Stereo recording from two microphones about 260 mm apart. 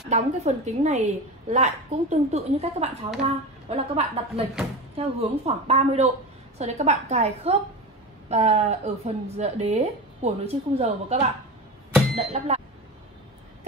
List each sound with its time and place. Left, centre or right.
0.1 s a woman's voice: right